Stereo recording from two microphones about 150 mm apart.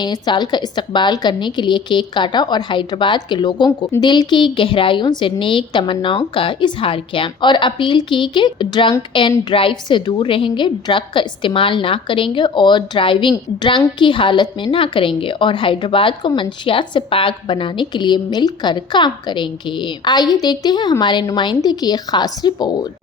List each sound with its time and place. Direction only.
0.0 s a woman's voice: 30° left (ahead or behind)